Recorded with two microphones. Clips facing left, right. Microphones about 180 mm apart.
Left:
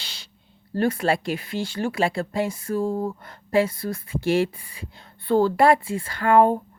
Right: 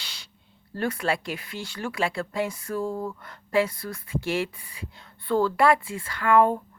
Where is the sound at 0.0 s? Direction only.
30° left (ahead or behind).